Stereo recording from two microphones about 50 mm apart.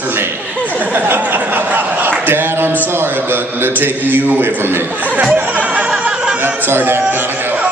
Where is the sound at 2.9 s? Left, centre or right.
Right.